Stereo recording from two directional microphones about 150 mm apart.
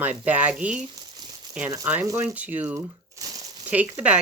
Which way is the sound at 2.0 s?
20° right (ahead or behind).